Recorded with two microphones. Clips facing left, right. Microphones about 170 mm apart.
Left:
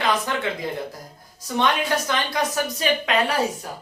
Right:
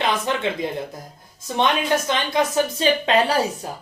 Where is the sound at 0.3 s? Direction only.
25° right (ahead or behind).